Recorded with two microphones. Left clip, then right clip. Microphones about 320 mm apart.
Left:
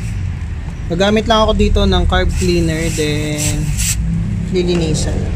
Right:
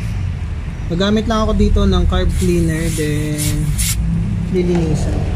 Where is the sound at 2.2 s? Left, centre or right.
Left.